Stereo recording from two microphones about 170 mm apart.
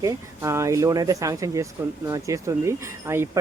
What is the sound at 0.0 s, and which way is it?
Speech, 15° right (ahead or behind).